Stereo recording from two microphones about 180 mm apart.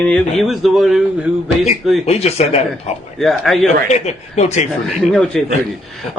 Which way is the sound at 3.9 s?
40° left (ahead or behind).